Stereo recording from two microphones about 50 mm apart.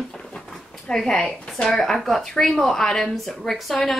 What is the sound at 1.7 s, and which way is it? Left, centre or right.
Speech, centre.